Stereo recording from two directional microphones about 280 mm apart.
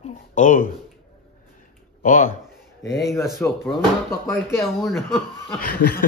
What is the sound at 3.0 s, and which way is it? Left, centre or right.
Speech, centre.